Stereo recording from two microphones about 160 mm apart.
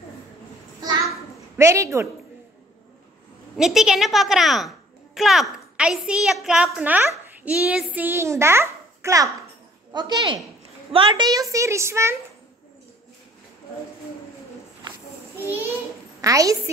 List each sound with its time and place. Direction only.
1.6 s a woman's voice: 20° right (ahead or behind)
3.5 s a child's voice: 5° right (ahead or behind)
15.4 s a woman's voice: 10° right (ahead or behind)